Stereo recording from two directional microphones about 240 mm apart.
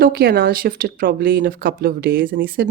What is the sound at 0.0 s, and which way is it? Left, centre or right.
Speech, right.